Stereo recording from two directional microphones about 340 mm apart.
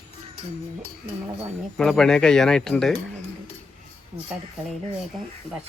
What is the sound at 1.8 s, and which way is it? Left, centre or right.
Speech, centre.